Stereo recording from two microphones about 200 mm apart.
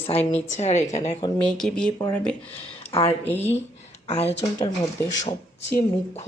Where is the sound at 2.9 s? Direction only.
25° left (ahead or behind).